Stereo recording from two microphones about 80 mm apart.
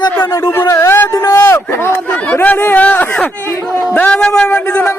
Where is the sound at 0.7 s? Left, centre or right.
Left.